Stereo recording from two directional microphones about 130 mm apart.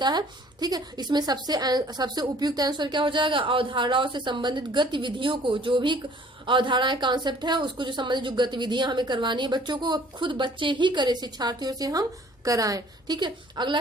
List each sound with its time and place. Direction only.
0.0 s speech: 35° right (ahead or behind)